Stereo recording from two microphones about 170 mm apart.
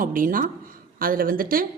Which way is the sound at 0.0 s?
55° right (ahead or behind).